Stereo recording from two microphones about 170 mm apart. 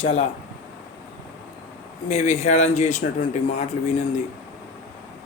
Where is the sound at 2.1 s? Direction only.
40° left (ahead or behind).